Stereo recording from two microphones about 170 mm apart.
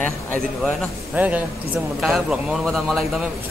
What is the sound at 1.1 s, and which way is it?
A man's voice, 10° right (ahead or behind).